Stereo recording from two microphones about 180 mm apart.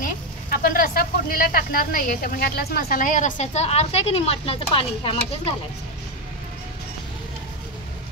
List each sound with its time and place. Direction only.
0.0 s speech: 50° left (ahead or behind); by 5.5 s 30° left (ahead or behind)